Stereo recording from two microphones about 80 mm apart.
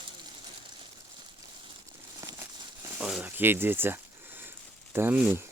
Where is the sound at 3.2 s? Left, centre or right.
Right.